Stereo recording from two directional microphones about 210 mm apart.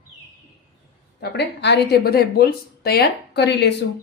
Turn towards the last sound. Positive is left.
turn(degrees=55)  # may be behind; listen again after turning